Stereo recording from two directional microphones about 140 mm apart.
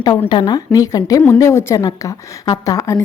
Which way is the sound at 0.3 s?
30° left (ahead or behind).